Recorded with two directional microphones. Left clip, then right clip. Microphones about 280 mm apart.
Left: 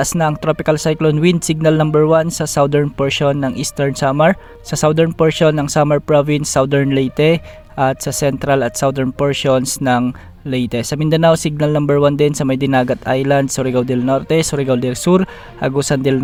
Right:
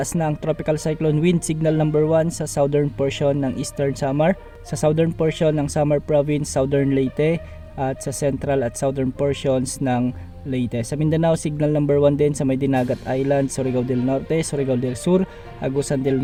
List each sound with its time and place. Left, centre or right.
0.0 s speech: left